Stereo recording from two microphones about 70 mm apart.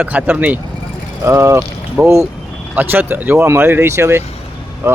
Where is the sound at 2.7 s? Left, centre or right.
Right.